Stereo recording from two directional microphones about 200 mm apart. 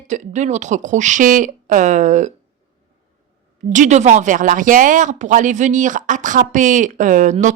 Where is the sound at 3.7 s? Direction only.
35° right (ahead or behind).